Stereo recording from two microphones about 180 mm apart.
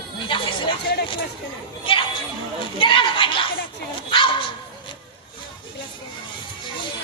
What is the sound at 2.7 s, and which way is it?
Speech, 30° left (ahead or behind).